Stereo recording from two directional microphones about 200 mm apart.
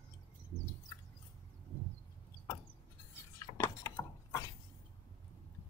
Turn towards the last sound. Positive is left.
turn(degrees=15)  # may be behind; listen again after turning